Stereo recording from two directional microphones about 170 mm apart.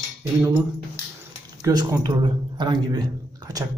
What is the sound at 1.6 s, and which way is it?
A man's voice, 20° right (ahead or behind).